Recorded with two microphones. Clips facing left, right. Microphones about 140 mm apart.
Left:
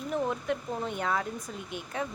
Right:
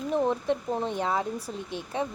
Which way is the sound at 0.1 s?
30° right (ahead or behind).